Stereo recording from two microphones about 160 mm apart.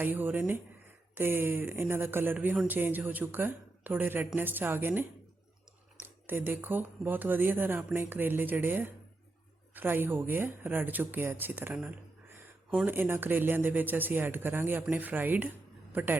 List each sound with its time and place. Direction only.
0.0 s speech: 10° right (ahead or behind)
6.2 s speech: 15° right (ahead or behind)